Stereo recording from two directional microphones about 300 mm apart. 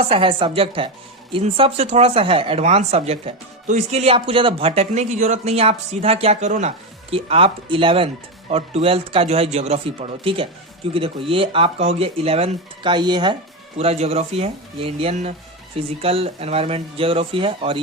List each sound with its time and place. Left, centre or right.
0.0 s speech: centre